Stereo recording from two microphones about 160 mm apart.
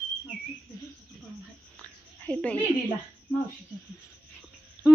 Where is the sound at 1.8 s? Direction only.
5° left (ahead or behind).